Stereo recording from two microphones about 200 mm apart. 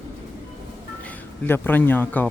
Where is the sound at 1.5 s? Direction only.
10° left (ahead or behind).